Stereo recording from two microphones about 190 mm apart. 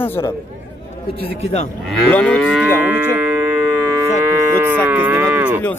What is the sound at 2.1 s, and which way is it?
Speech, 5° left (ahead or behind).